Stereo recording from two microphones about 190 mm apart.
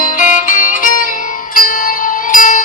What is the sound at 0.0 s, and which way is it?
Music, 45° left (ahead or behind).